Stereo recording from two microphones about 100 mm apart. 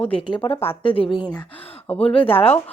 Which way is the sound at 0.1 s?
60° left (ahead or behind).